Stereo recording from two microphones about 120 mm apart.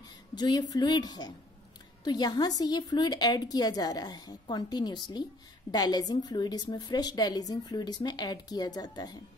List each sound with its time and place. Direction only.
0.4 s a woman's voice: 35° left (ahead or behind)